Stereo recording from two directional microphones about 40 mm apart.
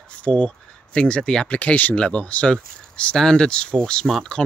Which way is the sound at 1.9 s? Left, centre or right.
Left.